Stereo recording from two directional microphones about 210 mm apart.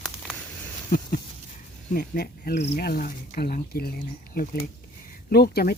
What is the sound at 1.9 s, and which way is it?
Speech, 45° left (ahead or behind).